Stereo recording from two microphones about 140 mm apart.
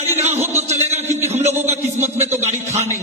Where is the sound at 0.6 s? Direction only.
50° right (ahead or behind).